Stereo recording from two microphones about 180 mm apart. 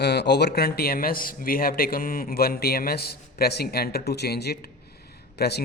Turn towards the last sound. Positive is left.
turn(degrees=65)  # may be behind; listen again after turning